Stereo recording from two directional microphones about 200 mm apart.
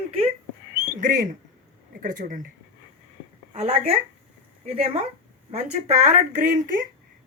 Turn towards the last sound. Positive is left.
turn(degrees=-40)  # may be behind; listen again after turning